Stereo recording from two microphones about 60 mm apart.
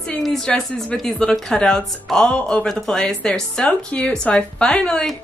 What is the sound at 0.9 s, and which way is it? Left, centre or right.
Speech, centre.